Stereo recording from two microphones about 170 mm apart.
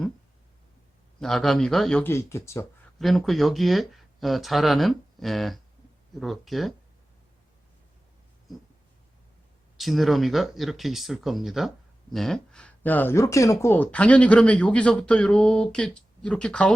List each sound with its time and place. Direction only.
1.2 s speech: centre (ahead or behind)
2.1 s speech: 15° left (ahead or behind)
3.0 s speech: centre (ahead or behind)
9.7 s speech: centre (ahead or behind)